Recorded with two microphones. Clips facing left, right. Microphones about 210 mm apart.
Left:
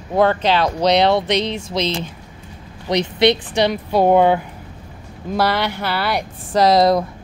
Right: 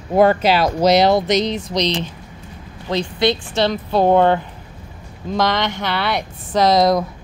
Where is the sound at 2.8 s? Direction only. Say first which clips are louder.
Left 3 dB; 20° left (ahead or behind).